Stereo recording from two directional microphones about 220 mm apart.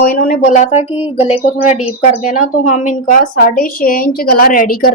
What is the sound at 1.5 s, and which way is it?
A woman's voice, 30° left (ahead or behind).